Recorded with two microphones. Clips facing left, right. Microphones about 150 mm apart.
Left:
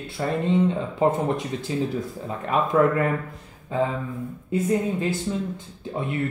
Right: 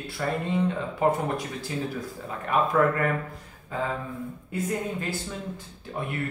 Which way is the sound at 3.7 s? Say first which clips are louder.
Left 5 dB; 25° left (ahead or behind).